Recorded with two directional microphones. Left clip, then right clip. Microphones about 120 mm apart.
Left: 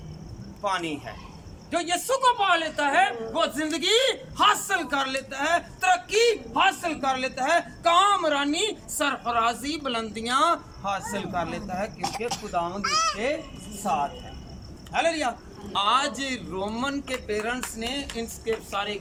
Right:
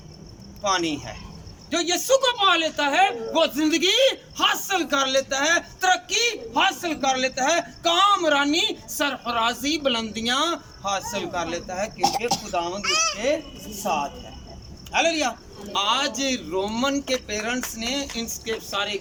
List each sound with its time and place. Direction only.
0.6 s a man's voice: 10° left (ahead or behind)
12.8 s a child's voice: 15° right (ahead or behind)
13.8 s a man's voice: 5° right (ahead or behind)